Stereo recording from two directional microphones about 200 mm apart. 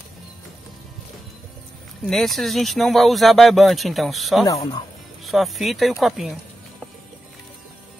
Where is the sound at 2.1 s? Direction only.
Centre (ahead or behind).